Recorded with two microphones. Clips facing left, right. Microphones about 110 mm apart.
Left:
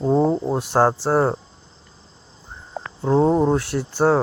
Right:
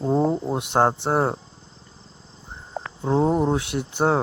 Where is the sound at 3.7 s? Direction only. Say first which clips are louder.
Left 2 dB; 25° right (ahead or behind).